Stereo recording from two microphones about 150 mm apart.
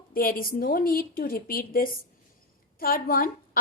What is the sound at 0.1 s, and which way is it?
A woman's voice, 75° left (ahead or behind).